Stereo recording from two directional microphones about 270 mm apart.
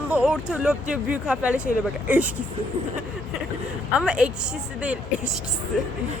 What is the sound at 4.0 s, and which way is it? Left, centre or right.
Speech, centre.